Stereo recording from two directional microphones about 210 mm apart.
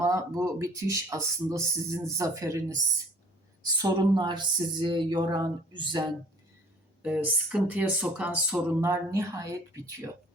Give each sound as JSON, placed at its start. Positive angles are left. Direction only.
{"t": 0.0, "sound": "speech", "side_deg": -15}
{"t": 7.0, "sound": "speech", "side_deg": -5}